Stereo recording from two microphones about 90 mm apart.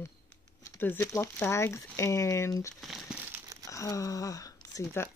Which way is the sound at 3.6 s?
35° left (ahead or behind).